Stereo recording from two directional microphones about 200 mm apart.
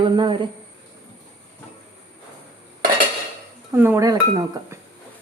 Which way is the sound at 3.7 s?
10° right (ahead or behind).